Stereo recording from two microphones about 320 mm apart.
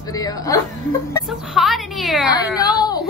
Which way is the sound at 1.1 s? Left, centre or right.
Centre.